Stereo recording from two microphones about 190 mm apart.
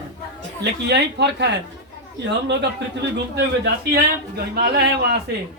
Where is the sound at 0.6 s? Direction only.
60° right (ahead or behind).